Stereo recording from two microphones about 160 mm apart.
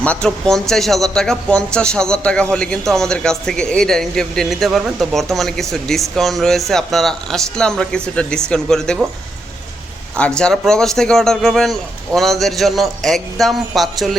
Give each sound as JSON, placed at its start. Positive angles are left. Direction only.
{"t": 0.0, "sound": "speech", "side_deg": 5}
{"t": 10.2, "sound": "speech", "side_deg": 5}